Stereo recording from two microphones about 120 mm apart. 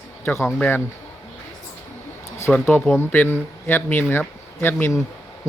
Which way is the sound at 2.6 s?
15° left (ahead or behind).